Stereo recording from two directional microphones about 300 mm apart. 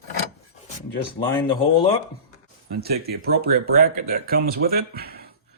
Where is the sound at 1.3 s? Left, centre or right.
Centre.